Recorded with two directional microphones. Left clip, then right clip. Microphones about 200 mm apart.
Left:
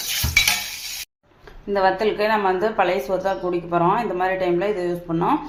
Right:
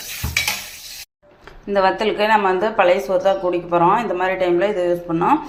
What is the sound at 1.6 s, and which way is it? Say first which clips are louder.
A woman's voice: right 2 dB; 10° right (ahead or behind).